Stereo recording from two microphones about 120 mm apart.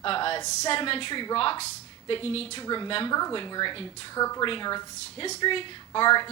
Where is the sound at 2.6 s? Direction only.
40° left (ahead or behind).